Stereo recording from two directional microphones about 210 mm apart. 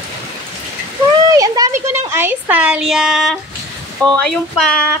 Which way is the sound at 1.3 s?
15° right (ahead or behind).